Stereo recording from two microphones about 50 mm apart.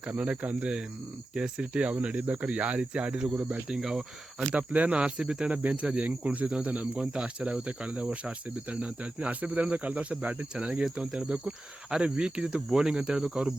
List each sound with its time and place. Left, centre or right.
0.2 s speech: right
4.5 s speech: right; by 13.5 s centre